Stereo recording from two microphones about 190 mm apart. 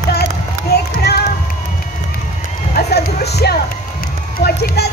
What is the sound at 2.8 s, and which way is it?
Run, 55° left (ahead or behind).